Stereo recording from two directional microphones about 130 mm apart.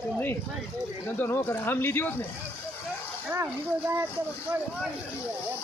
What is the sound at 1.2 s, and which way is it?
Speech, 15° left (ahead or behind).